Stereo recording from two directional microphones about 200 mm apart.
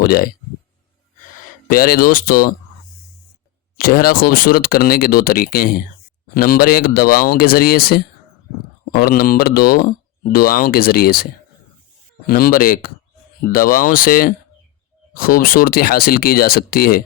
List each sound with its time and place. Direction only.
0.0 s speech: 50° left (ahead or behind)
1.7 s speech: 45° left (ahead or behind)
3.8 s speech: 45° left (ahead or behind)